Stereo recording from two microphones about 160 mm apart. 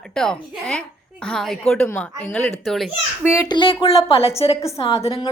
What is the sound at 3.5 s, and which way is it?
A woman's voice, 30° left (ahead or behind).